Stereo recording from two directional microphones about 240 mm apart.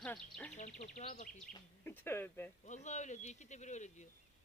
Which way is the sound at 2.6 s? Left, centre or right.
Left.